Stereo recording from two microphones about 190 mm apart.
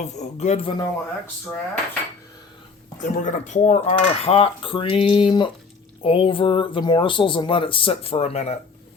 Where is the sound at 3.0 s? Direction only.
45° left (ahead or behind).